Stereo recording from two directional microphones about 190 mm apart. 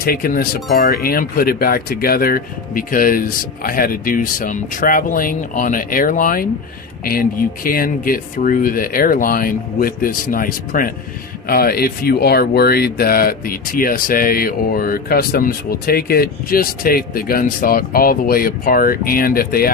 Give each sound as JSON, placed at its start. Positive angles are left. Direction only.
{"t": 0.0, "sound": "speech", "side_deg": 50}